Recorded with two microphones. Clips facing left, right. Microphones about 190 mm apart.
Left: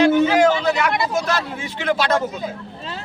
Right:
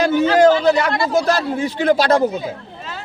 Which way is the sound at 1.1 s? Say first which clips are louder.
Right 5 dB; 35° right (ahead or behind).